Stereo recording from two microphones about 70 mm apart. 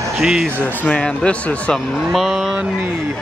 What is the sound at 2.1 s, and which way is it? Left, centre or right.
Speech, centre.